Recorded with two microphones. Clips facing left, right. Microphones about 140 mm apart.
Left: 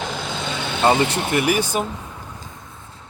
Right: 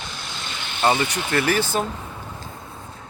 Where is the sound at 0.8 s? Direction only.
30° left (ahead or behind).